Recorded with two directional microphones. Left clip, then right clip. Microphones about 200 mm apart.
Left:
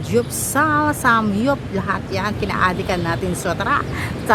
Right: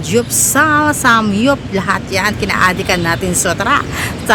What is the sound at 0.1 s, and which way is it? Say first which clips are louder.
A woman's voice: right 6 dB; 5° right (ahead or behind).